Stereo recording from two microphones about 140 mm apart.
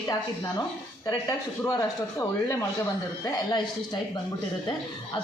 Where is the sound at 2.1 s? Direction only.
20° left (ahead or behind).